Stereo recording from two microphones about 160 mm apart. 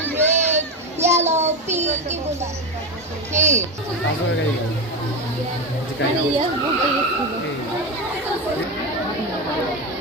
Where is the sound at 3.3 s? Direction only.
45° right (ahead or behind).